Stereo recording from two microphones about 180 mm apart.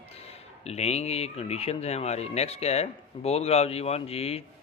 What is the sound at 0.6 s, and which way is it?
Speech, 35° left (ahead or behind).